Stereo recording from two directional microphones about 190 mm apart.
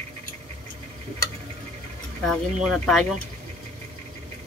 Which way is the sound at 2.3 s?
Centre (ahead or behind).